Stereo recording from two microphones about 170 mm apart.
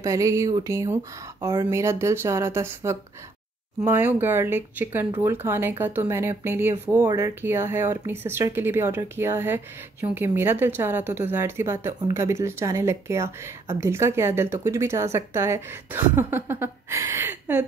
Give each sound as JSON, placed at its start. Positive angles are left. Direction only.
{"t": 0.0, "sound": "a woman's voice", "side_deg": -20}